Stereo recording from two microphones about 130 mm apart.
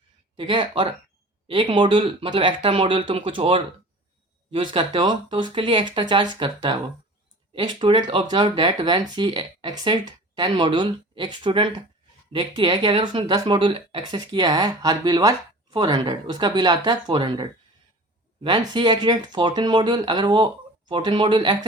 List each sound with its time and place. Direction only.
0.3 s speech: 40° right (ahead or behind)